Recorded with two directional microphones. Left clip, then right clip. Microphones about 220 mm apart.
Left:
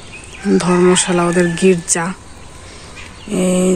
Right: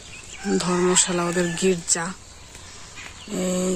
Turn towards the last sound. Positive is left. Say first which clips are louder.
# left 9 dB
turn(degrees=5)  # may be behind; listen again after turning